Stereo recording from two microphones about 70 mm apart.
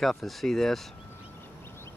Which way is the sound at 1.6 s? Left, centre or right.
Left.